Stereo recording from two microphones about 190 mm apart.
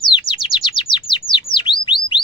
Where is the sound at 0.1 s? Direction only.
25° left (ahead or behind).